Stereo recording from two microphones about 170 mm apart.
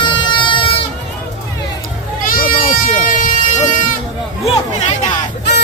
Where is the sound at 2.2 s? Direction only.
55° left (ahead or behind).